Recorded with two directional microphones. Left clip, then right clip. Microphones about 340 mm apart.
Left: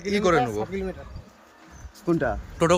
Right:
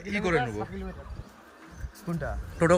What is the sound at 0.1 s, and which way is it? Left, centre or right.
Speech, centre.